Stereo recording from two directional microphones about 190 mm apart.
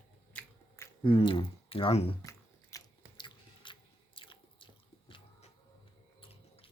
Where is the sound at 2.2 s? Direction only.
20° left (ahead or behind).